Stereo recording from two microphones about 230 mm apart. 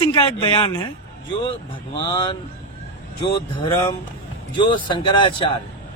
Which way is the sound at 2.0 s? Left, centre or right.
Centre.